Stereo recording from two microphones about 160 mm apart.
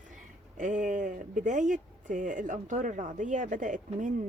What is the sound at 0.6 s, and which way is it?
Speech, 55° right (ahead or behind).